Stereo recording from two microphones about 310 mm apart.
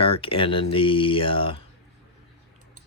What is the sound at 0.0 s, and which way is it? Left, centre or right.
Speech, centre.